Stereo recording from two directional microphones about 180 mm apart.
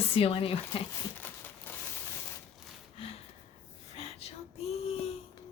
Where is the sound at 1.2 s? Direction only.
10° left (ahead or behind).